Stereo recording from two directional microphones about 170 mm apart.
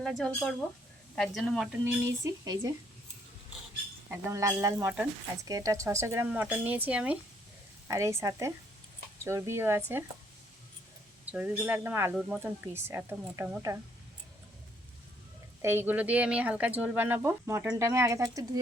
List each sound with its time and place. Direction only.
0.0 s speech: centre (ahead or behind)
2.2 s speech: 20° right (ahead or behind)
4.3 s speech: 20° right (ahead or behind)
11.3 s speech: 10° right (ahead or behind)
15.6 s speech: 10° right (ahead or behind)